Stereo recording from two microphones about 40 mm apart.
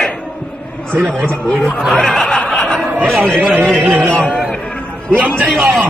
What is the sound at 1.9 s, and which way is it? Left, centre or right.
Snicker, centre.